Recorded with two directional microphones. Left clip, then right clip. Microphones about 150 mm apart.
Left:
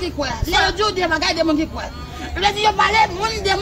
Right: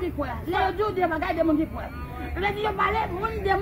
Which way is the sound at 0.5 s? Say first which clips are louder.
Left 7 dB; 15° left (ahead or behind).